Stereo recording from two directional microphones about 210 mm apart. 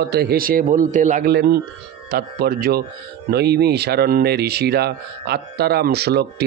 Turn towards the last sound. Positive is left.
turn(degrees=-50)  # may be behind; listen again after turning